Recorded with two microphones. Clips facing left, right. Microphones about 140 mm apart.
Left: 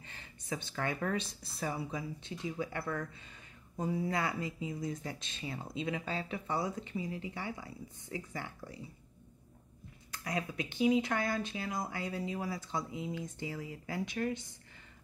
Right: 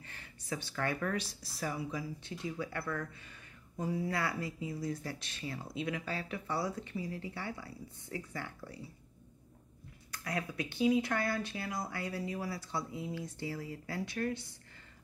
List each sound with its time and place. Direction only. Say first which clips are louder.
0.0 s speech: even; 20° left (ahead or behind)
10.1 s speech: left 1 dB; 20° left (ahead or behind)